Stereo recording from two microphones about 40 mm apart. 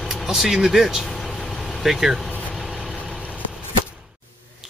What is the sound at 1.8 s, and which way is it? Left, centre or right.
Speech, centre.